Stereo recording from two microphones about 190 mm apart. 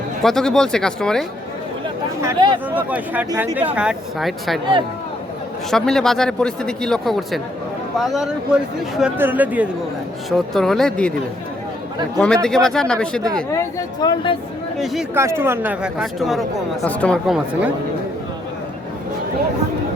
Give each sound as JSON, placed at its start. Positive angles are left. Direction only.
{"t": 0.2, "sound": "speech", "side_deg": 0}
{"t": 2.2, "sound": "speech", "side_deg": -25}
{"t": 2.7, "sound": "speech", "side_deg": -10}
{"t": 5.7, "sound": "speech", "side_deg": 5}
{"t": 12.2, "sound": "speech", "side_deg": 5}
{"t": 13.3, "sound": "speech", "side_deg": 15}
{"t": 15.1, "sound": "speech", "side_deg": -15}